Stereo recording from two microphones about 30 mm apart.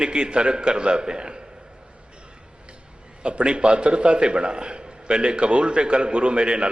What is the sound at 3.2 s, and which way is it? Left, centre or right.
A man's voice, right.